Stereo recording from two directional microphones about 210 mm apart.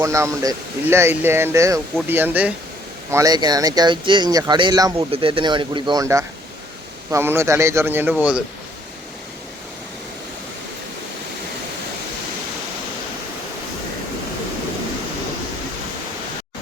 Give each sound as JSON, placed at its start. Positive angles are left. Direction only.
{"t": 0.0, "sound": "speech", "side_deg": -15}